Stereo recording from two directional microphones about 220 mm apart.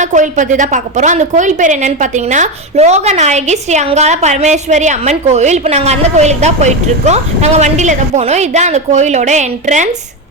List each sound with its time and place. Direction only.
0.0 s a woman's voice: 35° right (ahead or behind)